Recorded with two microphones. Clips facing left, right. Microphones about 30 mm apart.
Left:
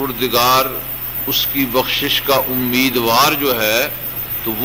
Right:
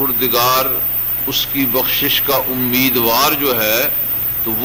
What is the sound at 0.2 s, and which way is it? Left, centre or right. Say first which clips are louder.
A man's voice: left 2 dB; centre.